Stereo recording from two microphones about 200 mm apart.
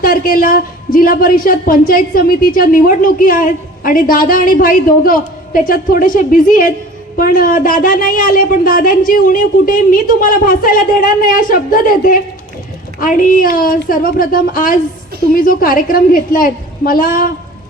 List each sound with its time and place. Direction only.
0.0 s a woman's voice: 45° left (ahead or behind)